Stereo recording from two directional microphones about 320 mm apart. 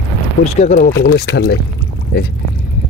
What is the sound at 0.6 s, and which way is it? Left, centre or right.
Speech, left.